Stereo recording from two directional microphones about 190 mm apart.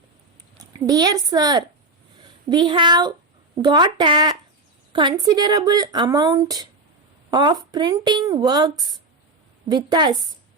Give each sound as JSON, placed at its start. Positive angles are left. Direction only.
{"t": 0.5, "sound": "a woman's voice", "side_deg": -20}